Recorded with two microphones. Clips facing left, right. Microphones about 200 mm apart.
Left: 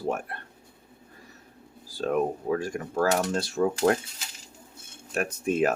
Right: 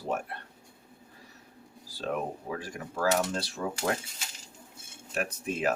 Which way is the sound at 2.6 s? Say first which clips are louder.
Left 5 dB; 50° left (ahead or behind).